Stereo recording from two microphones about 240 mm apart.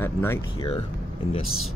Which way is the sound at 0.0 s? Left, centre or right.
Centre.